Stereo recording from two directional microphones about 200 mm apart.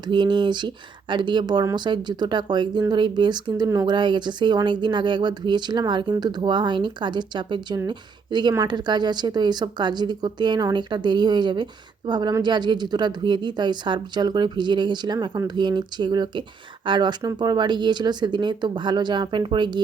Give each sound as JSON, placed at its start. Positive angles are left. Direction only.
{"t": 0.1, "sound": "speech", "side_deg": -20}